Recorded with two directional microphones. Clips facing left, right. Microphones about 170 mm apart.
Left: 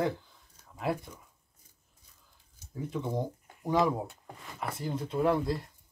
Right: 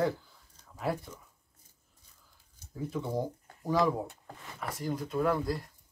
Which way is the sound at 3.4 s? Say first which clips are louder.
Left 3 dB; 20° left (ahead or behind).